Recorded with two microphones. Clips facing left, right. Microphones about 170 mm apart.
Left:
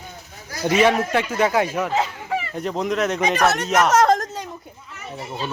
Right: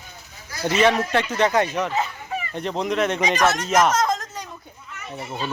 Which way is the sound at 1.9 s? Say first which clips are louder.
Left 3 dB; 90° left.